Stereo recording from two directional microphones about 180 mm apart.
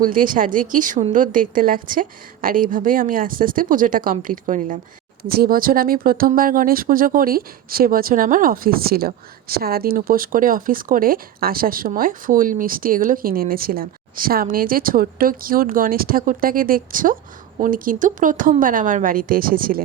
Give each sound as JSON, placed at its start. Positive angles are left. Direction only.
{"t": 0.0, "sound": "speech", "side_deg": -50}
{"t": 5.3, "sound": "speech", "side_deg": -55}